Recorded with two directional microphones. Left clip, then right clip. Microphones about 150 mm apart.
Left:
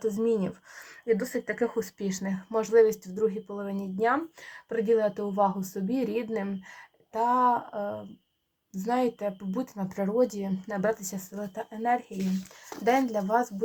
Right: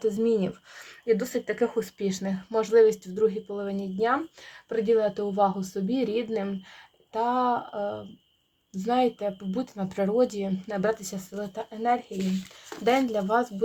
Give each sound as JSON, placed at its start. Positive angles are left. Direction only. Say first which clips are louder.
{"t": 0.0, "sound": "speech", "louder": "right 2 dB", "side_deg": -20}
{"t": 1.0, "sound": "speech", "louder": "right 2 dB", "side_deg": -40}
{"t": 2.0, "sound": "speech", "louder": "right 3 dB", "side_deg": -25}